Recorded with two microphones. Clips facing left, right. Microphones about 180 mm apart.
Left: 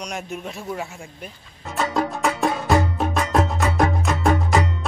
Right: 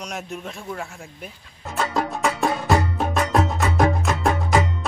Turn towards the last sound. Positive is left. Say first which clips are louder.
# even
turn(degrees=0)  # may be behind; listen again after turning